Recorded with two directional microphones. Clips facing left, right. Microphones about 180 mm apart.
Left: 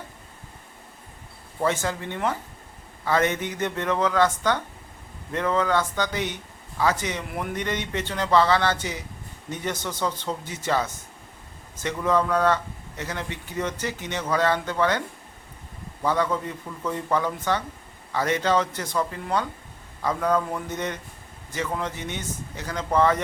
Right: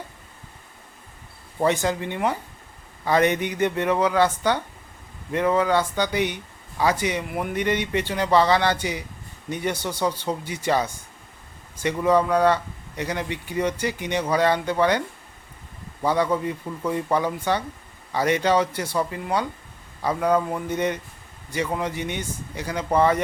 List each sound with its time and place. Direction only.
1.6 s speech: 15° right (ahead or behind)
16.0 s speech: 10° right (ahead or behind)